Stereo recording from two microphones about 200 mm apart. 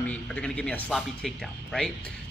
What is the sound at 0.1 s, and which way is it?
Speech, 5° left (ahead or behind).